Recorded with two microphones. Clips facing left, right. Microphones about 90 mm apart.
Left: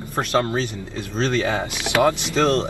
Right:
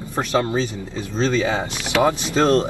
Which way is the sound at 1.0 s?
60° left (ahead or behind).